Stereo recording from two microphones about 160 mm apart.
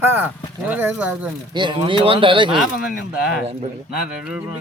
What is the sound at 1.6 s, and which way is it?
Speech, 30° right (ahead or behind).